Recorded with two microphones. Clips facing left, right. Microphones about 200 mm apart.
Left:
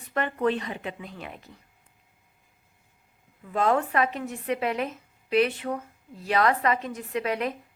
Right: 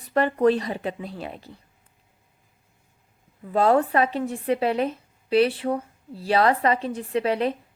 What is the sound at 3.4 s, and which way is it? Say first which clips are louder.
Speech: right 5 dB; 35° right (ahead or behind).